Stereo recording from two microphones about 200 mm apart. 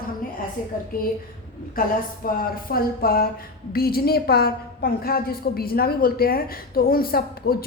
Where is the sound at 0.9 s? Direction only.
45° left (ahead or behind).